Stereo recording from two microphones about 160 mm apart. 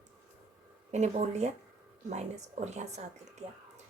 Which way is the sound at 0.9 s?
45° right (ahead or behind).